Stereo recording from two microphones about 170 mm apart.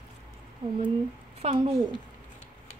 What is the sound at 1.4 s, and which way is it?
Speech, 35° right (ahead or behind).